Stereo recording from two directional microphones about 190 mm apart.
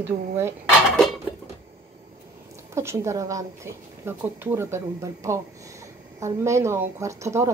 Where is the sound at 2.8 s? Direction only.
15° right (ahead or behind).